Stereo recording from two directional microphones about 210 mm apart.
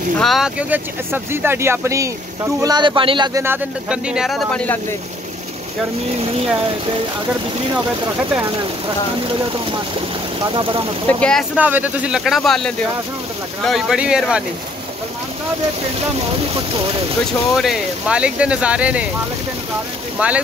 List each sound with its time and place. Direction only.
0.2 s speech: centre (ahead or behind); by 3.4 s 25° right (ahead or behind)
3.4 s speech: 5° right (ahead or behind)
7.7 s speech: 10° right (ahead or behind)
9.3 s speech: 25° right (ahead or behind)
11.1 s speech: 5° left (ahead or behind)
11.5 s speech: 5° right (ahead or behind)
16.5 s speech: 25° right (ahead or behind)
17.6 s speech: 5° right (ahead or behind)
20.2 s speech: 5° right (ahead or behind)